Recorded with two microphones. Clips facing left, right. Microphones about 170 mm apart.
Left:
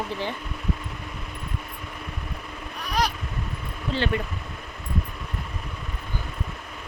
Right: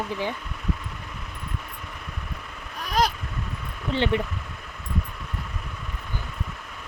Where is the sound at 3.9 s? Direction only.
20° right (ahead or behind).